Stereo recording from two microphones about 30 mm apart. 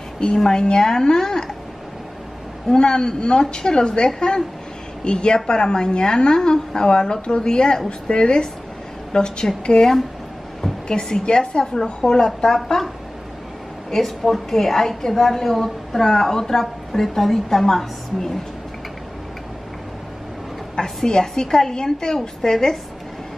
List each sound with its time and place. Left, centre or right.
0.4 s a woman's voice: centre
2.7 s a woman's voice: left; by 18.4 s centre
20.7 s a woman's voice: centre